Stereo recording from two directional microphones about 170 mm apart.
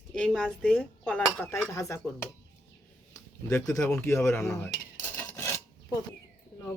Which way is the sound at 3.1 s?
20° left (ahead or behind).